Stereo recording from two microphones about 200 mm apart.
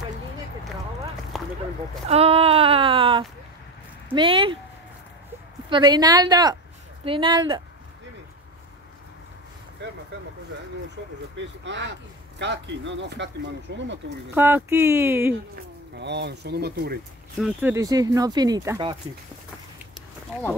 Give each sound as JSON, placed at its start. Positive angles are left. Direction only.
{"t": 1.3, "sound": "a sound", "side_deg": 0}
{"t": 2.0, "sound": "a sound", "side_deg": -30}
{"t": 4.1, "sound": "a woman's voice", "side_deg": -25}
{"t": 5.7, "sound": "a woman's voice", "side_deg": -20}
{"t": 9.8, "sound": "vehicle", "side_deg": -60}
{"t": 11.0, "sound": "speech", "side_deg": -65}
{"t": 14.3, "sound": "speech", "side_deg": -10}
{"t": 15.5, "sound": "speech", "side_deg": -60}
{"t": 17.4, "sound": "speech", "side_deg": -10}